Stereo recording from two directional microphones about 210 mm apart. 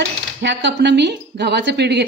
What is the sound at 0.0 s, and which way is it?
A woman's voice, 55° right (ahead or behind).